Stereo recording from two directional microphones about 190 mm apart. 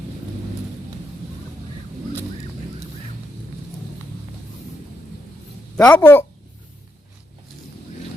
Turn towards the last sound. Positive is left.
turn(degrees=10)  # may be behind; listen again after turning